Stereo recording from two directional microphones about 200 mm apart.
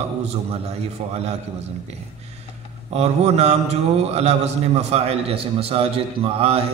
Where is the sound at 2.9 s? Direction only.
35° right (ahead or behind).